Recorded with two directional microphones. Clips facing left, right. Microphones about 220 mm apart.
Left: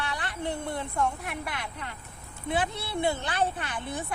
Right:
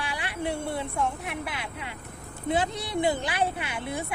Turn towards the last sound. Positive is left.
turn(degrees=-10)  # may be behind; listen again after turning